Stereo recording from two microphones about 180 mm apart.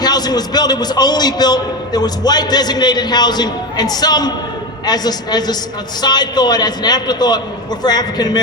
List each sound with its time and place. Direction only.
0.0 s a man's voice: 20° left (ahead or behind)